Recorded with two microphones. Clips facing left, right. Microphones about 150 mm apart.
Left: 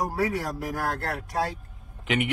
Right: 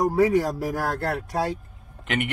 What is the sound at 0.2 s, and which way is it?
Speech, 25° right (ahead or behind).